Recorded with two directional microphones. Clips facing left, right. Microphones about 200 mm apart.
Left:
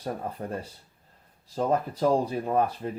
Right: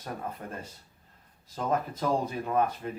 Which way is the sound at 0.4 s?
35° left (ahead or behind).